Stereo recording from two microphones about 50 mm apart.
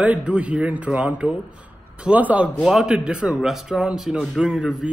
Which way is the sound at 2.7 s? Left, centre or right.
Centre.